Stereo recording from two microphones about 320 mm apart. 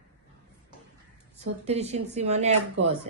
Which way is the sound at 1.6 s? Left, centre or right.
Centre.